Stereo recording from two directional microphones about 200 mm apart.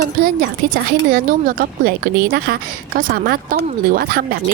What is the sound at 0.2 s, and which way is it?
Speech, 45° right (ahead or behind).